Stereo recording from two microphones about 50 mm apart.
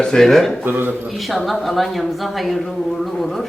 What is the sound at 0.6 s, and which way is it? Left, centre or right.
Speech, right.